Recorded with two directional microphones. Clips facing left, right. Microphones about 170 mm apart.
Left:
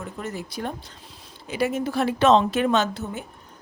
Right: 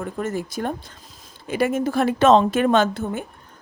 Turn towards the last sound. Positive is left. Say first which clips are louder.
# right 4 dB
turn(degrees=-50)  # may be behind; listen again after turning